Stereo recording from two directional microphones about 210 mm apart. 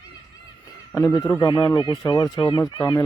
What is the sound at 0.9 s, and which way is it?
Speech, 15° left (ahead or behind).